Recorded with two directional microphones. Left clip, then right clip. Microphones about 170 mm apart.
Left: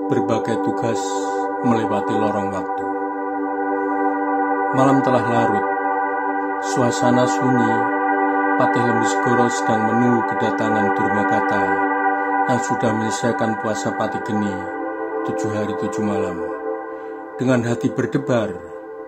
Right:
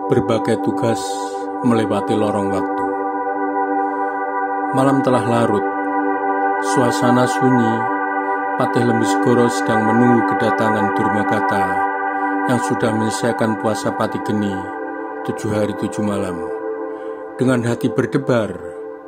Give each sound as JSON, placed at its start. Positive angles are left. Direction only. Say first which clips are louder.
{"t": 0.1, "sound": "music", "louder": "right 3 dB", "side_deg": -30}
{"t": 4.7, "sound": "music", "louder": "right 1 dB", "side_deg": -30}
{"t": 6.7, "sound": "music", "louder": "even", "side_deg": -30}
{"t": 8.5, "sound": "music", "louder": "even", "side_deg": -30}
{"t": 15.5, "sound": "music", "louder": "right 2 dB", "side_deg": -30}
{"t": 17.4, "sound": "music", "louder": "right 1 dB", "side_deg": -30}